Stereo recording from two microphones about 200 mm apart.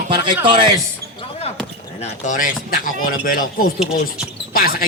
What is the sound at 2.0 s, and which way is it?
Speech, 35° left (ahead or behind).